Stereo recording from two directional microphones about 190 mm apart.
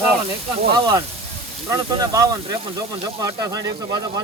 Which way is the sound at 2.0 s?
20° right (ahead or behind).